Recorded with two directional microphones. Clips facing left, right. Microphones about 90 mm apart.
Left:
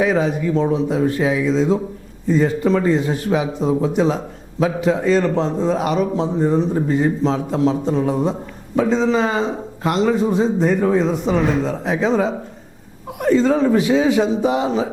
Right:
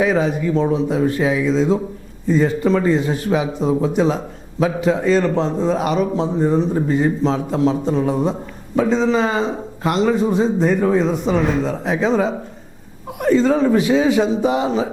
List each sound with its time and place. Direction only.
0.0 s a man's voice: 20° right (ahead or behind)
12.0 s a man's voice: 20° right (ahead or behind)